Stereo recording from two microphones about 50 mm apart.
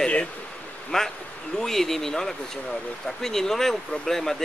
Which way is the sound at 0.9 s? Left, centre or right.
Centre.